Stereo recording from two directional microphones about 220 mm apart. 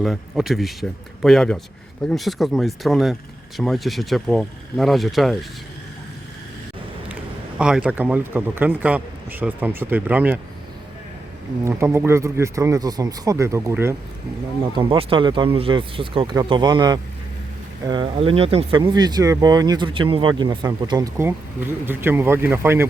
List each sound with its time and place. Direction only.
0.0 s speech: centre (ahead or behind)
7.6 s a man's voice: 5° right (ahead or behind)
11.6 s a man's voice: 10° right (ahead or behind)
14.8 s speech: 20° right (ahead or behind)